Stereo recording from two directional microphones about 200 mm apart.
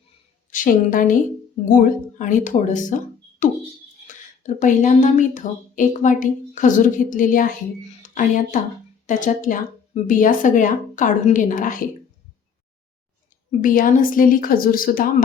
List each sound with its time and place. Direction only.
0.5 s a woman's voice: 40° left (ahead or behind)
4.0 s speech: 40° left (ahead or behind)
13.5 s speech: 40° left (ahead or behind)